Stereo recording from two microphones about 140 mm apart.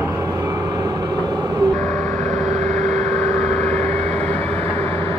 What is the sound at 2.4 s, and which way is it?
Vehicle, 55° right (ahead or behind).